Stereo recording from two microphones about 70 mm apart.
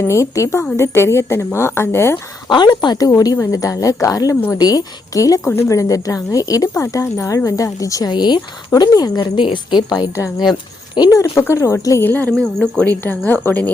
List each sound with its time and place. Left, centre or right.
0.1 s a woman's voice: left
2.5 s speech: left
3.5 s a woman's voice: left
4.5 s a woman's voice: left
5.5 s speech: left
8.1 s speech: left
8.8 s speech: left
10.2 s speech: left
10.5 s speech: left
11.1 s speech: left
12.0 s speech: left
12.4 s speech: centre
13.0 s speech: left